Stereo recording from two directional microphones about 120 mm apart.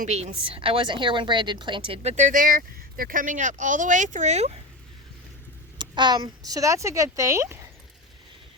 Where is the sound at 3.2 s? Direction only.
90° right; by 4.6 s 65° right (ahead or behind).